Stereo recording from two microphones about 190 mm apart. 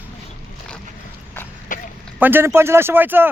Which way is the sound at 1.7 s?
45° left (ahead or behind).